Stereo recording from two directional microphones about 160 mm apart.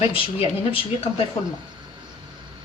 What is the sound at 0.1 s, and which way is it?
Speech, 35° left (ahead or behind).